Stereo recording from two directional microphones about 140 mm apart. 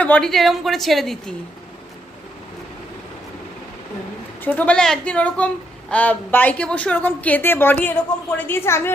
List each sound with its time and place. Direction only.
0.0 s a woman's voice: 5° left (ahead or behind)
4.4 s a woman's voice: 10° left (ahead or behind)